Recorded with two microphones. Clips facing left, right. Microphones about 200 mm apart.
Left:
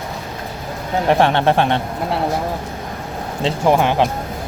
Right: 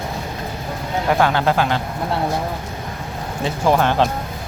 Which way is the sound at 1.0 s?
25° left (ahead or behind).